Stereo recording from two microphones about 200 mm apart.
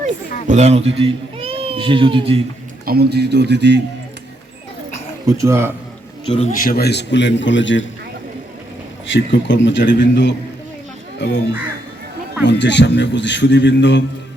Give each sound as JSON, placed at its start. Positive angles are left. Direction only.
{"t": 0.4, "sound": "speech", "side_deg": -35}
{"t": 2.8, "sound": "speech", "side_deg": -50}
{"t": 5.2, "sound": "speech", "side_deg": -15}
{"t": 6.2, "sound": "a man's voice", "side_deg": 30}
{"t": 6.5, "sound": "a man's voice", "side_deg": 50}
{"t": 9.1, "sound": "a man's voice", "side_deg": 65}
{"t": 12.5, "sound": "a man's voice", "side_deg": 60}